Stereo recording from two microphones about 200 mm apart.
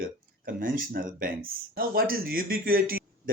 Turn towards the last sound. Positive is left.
turn(degrees=-45)  # may be behind; listen again after turning